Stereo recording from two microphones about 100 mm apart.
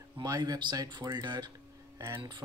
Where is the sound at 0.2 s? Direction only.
40° right (ahead or behind).